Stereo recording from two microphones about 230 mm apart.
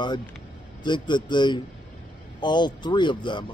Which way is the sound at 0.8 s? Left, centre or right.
Centre.